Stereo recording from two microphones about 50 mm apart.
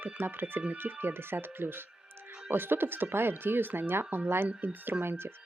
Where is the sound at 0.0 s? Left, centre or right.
Right.